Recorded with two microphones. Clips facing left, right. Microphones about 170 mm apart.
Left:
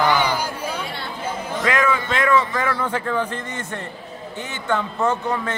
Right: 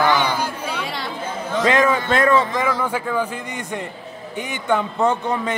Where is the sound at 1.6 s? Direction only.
30° right (ahead or behind).